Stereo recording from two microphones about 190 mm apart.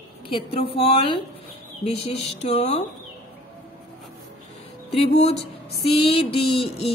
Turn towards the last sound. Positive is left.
turn(degrees=30)  # may be behind; listen again after turning